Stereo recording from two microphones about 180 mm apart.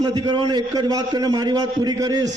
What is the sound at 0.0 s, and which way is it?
A man's voice, 20° right (ahead or behind).